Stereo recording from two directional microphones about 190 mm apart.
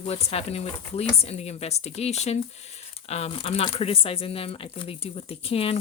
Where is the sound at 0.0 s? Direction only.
30° left (ahead or behind).